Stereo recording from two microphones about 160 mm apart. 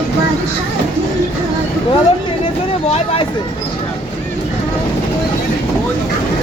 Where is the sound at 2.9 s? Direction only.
35° left (ahead or behind).